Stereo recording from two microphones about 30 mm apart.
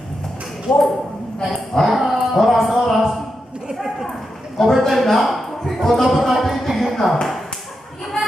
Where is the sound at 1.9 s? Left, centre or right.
Centre.